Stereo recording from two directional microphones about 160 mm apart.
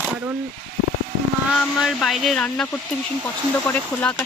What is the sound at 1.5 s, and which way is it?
Speech, centre (ahead or behind).